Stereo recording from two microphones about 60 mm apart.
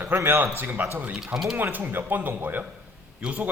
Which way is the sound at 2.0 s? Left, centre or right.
Right.